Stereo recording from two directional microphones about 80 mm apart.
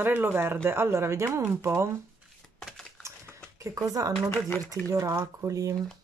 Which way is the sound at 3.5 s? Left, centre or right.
Right.